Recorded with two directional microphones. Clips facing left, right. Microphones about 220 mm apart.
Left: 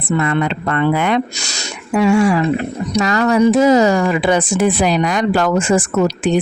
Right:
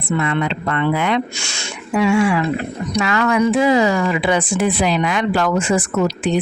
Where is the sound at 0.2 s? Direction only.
45° left (ahead or behind).